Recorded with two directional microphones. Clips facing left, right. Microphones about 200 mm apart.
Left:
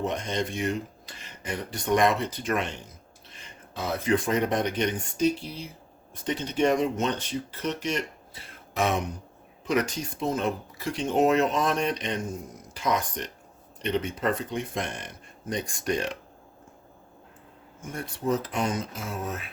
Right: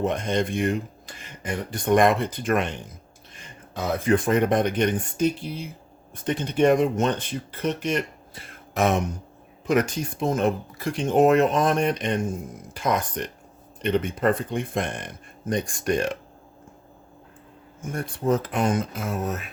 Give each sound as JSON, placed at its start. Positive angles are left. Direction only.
{"t": 0.0, "sound": "speech", "side_deg": -55}
{"t": 3.8, "sound": "speech", "side_deg": -50}
{"t": 17.8, "sound": "speech", "side_deg": -50}